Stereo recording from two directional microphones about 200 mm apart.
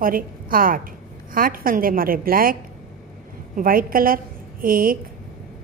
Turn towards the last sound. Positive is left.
turn(degrees=-45)  # may be behind; listen again after turning